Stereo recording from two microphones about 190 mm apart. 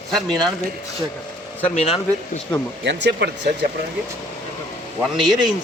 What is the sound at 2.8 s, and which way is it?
Speech, 65° right (ahead or behind).